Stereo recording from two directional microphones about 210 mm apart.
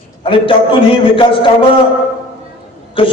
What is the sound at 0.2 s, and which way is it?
A man's voice, 25° left (ahead or behind).